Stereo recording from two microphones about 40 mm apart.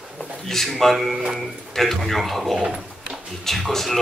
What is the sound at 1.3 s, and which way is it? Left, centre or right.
Speech, centre.